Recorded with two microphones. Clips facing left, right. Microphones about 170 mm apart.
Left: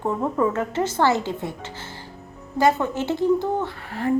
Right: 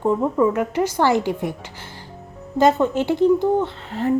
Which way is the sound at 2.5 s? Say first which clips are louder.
Right 4 dB; 20° right (ahead or behind).